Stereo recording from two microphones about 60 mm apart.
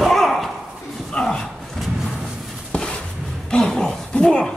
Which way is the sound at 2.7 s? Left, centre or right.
Centre.